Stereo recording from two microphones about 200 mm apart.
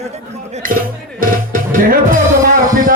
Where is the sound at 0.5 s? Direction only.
45° right (ahead or behind).